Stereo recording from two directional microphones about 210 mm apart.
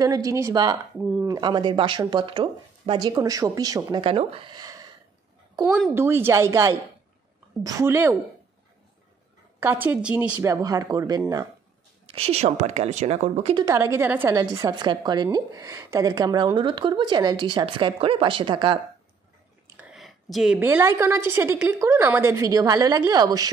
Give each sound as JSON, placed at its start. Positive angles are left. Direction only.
{"t": 0.0, "sound": "a woman's voice", "side_deg": -15}
{"t": 0.9, "sound": "speech", "side_deg": 0}
{"t": 1.2, "sound": "a woman's voice", "side_deg": -20}
{"t": 9.6, "sound": "a woman's voice", "side_deg": -10}
{"t": 12.1, "sound": "a woman's voice", "side_deg": -30}
{"t": 13.7, "sound": "a woman's voice", "side_deg": -15}
{"t": 19.8, "sound": "a woman's voice", "side_deg": 0}